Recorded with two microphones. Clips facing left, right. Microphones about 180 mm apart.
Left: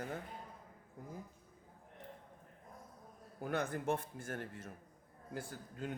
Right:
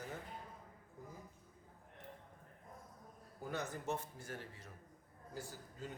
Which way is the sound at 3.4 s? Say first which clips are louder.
Left 5 dB; 60° left (ahead or behind).